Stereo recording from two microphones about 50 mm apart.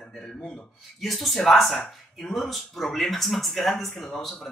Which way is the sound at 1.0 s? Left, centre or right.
Centre.